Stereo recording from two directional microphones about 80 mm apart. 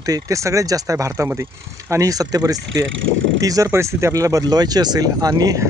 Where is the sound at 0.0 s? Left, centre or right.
Right.